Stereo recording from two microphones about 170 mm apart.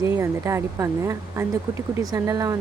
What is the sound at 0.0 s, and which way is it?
Speech, 15° right (ahead or behind).